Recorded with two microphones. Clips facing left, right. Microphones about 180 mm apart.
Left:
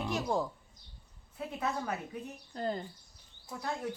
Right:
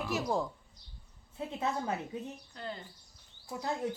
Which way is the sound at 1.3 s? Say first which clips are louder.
Right 1 dB; 25° right (ahead or behind).